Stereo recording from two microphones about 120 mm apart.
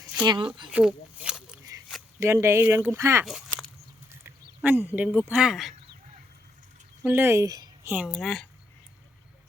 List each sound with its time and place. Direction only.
0.3 s speech: 40° right (ahead or behind)
0.7 s a sound: 10° right (ahead or behind)
2.1 s speech: 20° right (ahead or behind)
3.2 s a sound: centre (ahead or behind)
4.1 s speech: 15° right (ahead or behind)
7.0 s speech: 15° right (ahead or behind)
7.9 s speech: 10° right (ahead or behind)